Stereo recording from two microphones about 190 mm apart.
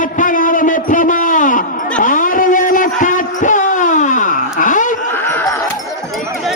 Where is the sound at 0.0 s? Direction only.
45° left (ahead or behind).